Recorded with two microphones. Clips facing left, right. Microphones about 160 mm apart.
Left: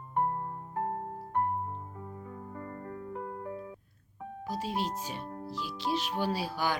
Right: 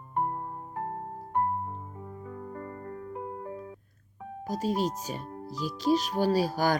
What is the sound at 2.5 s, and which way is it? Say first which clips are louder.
Music: even; 35° right (ahead or behind).